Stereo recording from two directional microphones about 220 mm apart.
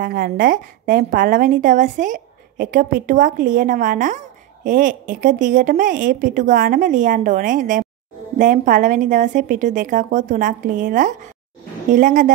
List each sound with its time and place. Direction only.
0.0 s a woman's voice: 40° right (ahead or behind)